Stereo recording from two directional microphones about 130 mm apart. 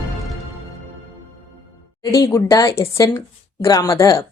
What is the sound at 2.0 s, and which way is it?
Speech, 25° left (ahead or behind).